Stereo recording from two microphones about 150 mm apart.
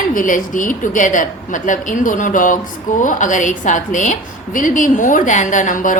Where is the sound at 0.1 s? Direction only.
65° left (ahead or behind).